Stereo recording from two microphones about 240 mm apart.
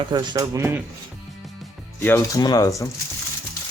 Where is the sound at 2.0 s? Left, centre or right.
Centre.